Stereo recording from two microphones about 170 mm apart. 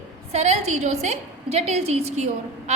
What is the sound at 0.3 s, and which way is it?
A woman's voice, 40° right (ahead or behind).